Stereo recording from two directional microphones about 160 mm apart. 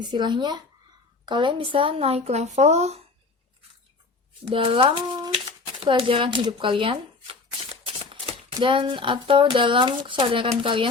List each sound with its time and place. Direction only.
0.0 s speech: 25° right (ahead or behind); by 3.0 s 45° right (ahead or behind)
4.4 s speech: 35° right (ahead or behind)